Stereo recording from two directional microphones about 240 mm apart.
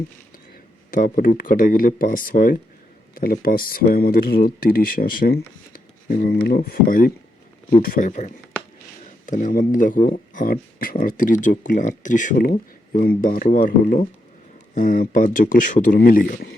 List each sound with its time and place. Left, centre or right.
0.9 s speech: left